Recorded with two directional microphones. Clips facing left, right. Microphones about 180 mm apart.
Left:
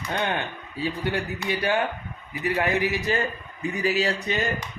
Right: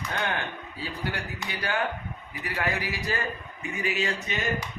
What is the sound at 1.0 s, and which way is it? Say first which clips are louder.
A man's voice: left 6 dB; 25° left (ahead or behind).